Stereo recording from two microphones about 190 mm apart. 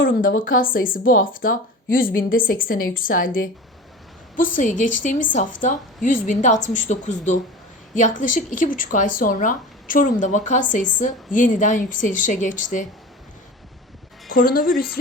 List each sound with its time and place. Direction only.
0.2 s a woman's voice: 45° left (ahead or behind)
4.5 s a woman's voice: 40° left (ahead or behind)
14.3 s a woman's voice: 50° left (ahead or behind)